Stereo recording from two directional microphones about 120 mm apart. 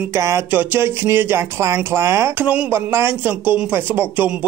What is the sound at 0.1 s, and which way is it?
A man's voice, 25° right (ahead or behind).